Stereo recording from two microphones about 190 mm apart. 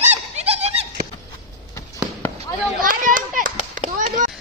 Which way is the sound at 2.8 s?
45° right (ahead or behind).